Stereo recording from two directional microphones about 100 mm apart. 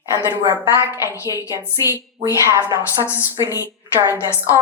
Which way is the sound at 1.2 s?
35° left (ahead or behind).